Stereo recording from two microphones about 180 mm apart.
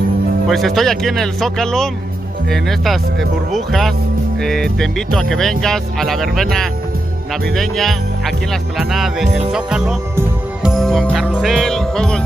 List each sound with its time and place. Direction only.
0.5 s speech: centre (ahead or behind)
7.5 s speech: centre (ahead or behind)
10.1 s music: 5° right (ahead or behind)